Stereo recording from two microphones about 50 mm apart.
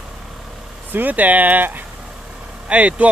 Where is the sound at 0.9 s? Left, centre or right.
Right.